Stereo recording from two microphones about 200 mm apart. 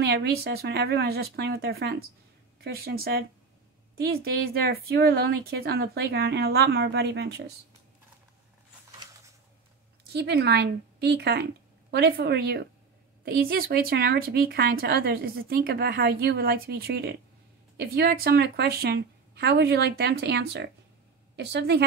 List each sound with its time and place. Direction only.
0.0 s speech: 55° right (ahead or behind)
10.1 s a woman's voice: 55° right (ahead or behind)